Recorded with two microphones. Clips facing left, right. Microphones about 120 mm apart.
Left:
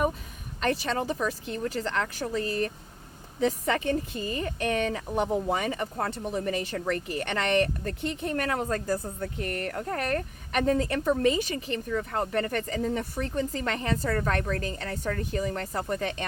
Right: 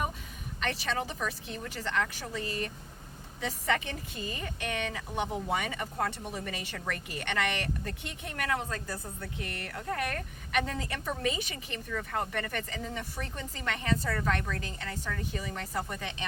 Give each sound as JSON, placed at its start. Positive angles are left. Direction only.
{"t": 0.6, "sound": "a woman's voice", "side_deg": 40}